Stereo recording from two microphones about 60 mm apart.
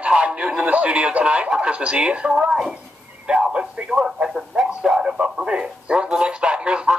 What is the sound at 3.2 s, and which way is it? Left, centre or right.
Speech, centre.